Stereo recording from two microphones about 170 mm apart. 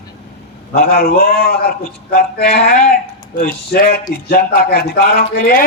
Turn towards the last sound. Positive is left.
turn(degrees=55)  # may be behind; listen again after turning